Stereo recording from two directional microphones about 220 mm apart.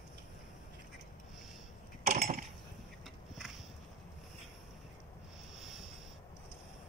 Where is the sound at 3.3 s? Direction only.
Centre (ahead or behind).